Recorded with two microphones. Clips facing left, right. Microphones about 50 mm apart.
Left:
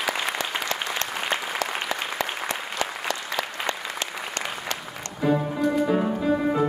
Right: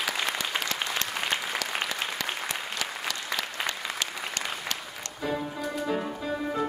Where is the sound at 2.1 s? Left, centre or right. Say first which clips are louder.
Left 4 dB; left.